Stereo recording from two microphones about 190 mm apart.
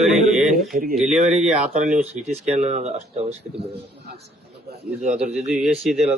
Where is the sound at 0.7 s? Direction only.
50° right (ahead or behind).